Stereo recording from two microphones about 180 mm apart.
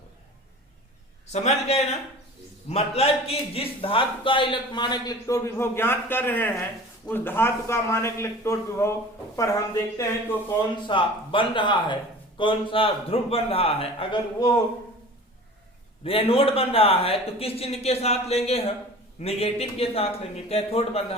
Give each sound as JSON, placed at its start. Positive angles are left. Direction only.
{"t": 1.3, "sound": "a man's voice", "side_deg": 35}
{"t": 10.8, "sound": "a man's voice", "side_deg": 30}
{"t": 16.0, "sound": "a man's voice", "side_deg": 30}